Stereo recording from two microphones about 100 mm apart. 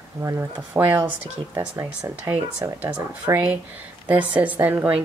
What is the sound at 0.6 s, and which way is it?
Speech, 15° right (ahead or behind).